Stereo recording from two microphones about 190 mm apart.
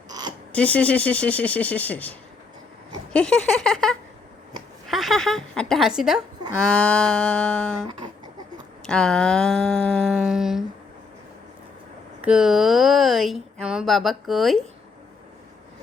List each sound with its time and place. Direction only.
0.5 s speech: 5° left (ahead or behind)
7.9 s speech: 25° right (ahead or behind)
8.8 s speech: 5° left (ahead or behind)
12.2 s speech: 5° right (ahead or behind)